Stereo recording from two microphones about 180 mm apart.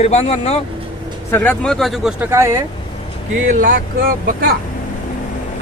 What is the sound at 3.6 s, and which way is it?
Speech, 50° right (ahead or behind).